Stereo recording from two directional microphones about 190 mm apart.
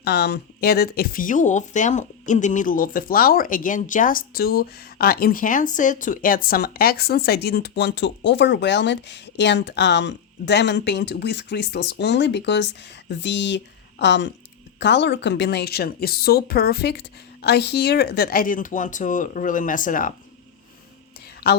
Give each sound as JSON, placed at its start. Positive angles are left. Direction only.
{"t": 0.0, "sound": "a woman's voice", "side_deg": 60}
{"t": 21.5, "sound": "speech", "side_deg": 55}